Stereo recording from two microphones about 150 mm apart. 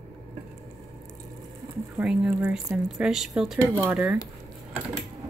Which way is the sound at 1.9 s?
10° right (ahead or behind).